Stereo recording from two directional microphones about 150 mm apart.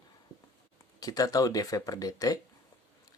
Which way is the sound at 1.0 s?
25° left (ahead or behind).